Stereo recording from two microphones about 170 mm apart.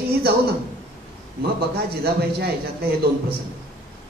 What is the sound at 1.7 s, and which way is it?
Speech, 70° right (ahead or behind).